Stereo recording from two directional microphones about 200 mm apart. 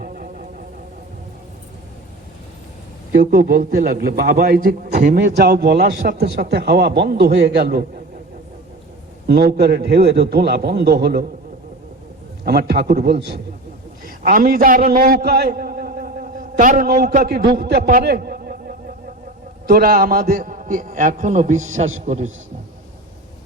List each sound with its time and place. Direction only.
0.0 s vehicle: 45° right (ahead or behind)
3.3 s a man's voice: 45° right (ahead or behind)
9.2 s a man's voice: 55° right (ahead or behind)
12.5 s a man's voice: 55° right (ahead or behind)
14.0 s a man's voice: 45° right (ahead or behind)